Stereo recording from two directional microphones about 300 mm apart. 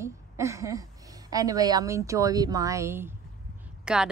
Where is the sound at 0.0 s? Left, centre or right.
Centre.